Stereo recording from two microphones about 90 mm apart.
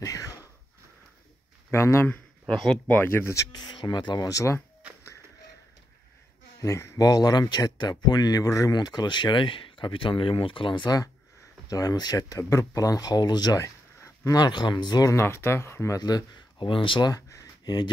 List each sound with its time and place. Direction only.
0.0 s a sound: 40° left (ahead or behind)
1.7 s speech: 30° left (ahead or behind)
2.4 s speech: 5° left (ahead or behind)
2.9 s speech: 25° left (ahead or behind)
3.5 s speech: 55° left (ahead or behind)
4.3 s speech: 35° left (ahead or behind)
6.6 s speech: 35° left (ahead or behind); by 10.9 s 65° left (ahead or behind)
11.7 s speech: 45° left (ahead or behind)
14.4 s speech: 50° left (ahead or behind)
15.0 s speech: 30° left (ahead or behind)
16.0 s speech: 50° left (ahead or behind); by 17.1 s 70° left (ahead or behind)
17.1 s a sound: 40° left (ahead or behind)